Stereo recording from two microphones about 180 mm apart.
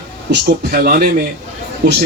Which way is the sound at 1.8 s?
70° right (ahead or behind).